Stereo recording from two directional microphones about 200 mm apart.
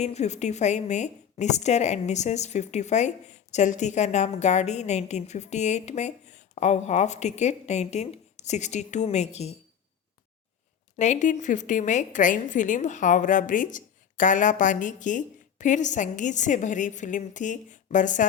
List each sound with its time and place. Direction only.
0.0 s a woman's voice: 35° left (ahead or behind)
10.9 s a woman's voice: 35° left (ahead or behind)